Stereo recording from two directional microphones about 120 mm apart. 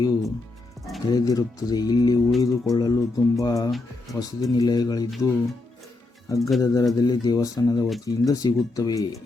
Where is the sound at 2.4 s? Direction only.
30° left (ahead or behind).